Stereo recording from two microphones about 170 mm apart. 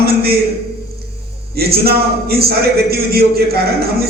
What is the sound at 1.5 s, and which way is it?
A man's voice, 65° right (ahead or behind).